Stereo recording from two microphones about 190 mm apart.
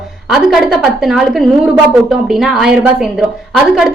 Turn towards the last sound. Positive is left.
turn(degrees=0)  # may be behind; listen again after turning